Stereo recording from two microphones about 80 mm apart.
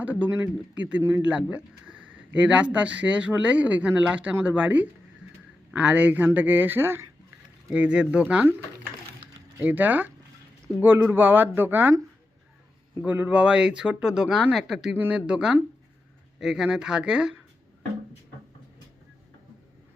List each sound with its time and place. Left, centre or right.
0.0 s speech: right
7.7 s speech: centre
9.6 s speech: right
13.1 s speech: right
14.9 s speech: centre